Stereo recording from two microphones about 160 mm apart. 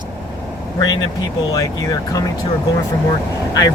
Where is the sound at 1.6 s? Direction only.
20° left (ahead or behind).